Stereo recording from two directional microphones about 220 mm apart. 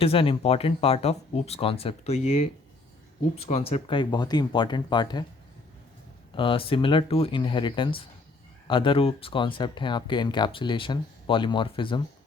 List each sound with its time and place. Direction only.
0.0 s speech: 25° left (ahead or behind)
6.3 s speech: 25° left (ahead or behind)